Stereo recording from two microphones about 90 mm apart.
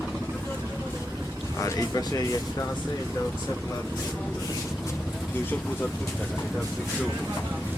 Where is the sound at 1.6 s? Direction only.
40° left (ahead or behind).